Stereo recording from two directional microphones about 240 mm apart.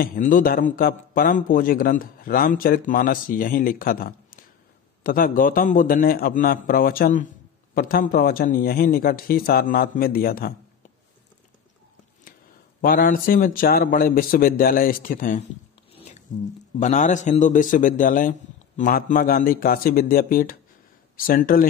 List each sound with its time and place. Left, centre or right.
0.0 s a man's voice: left
12.8 s a man's voice: left
15.9 s a sound: left
16.8 s a man's voice: left